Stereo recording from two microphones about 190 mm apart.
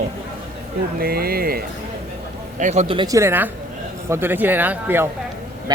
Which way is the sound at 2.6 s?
35° right (ahead or behind).